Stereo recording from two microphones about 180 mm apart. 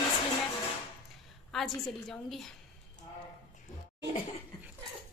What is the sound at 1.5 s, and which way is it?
A woman's voice, centre (ahead or behind).